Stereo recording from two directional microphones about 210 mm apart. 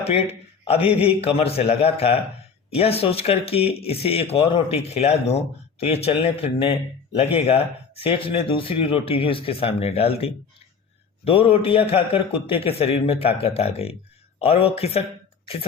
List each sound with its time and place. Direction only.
0.0 s speech: 30° left (ahead or behind)